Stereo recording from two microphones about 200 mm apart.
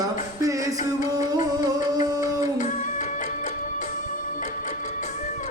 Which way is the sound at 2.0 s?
20° right (ahead or behind).